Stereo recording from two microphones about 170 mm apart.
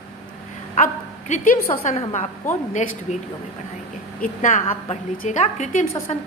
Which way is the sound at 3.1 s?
45° left (ahead or behind).